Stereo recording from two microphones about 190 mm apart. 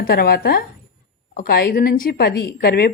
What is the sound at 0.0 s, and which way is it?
Speech, 55° left (ahead or behind).